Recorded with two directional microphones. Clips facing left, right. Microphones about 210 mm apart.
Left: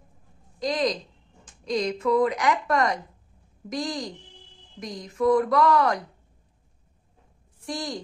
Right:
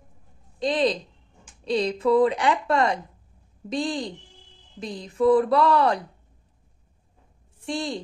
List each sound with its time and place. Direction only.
0.6 s a woman's voice: 30° right (ahead or behind)
7.6 s speech: 25° right (ahead or behind)